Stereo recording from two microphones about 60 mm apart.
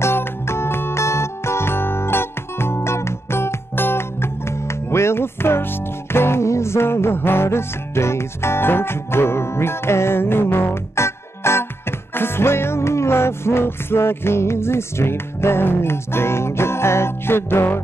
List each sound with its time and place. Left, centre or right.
0.0 s music: left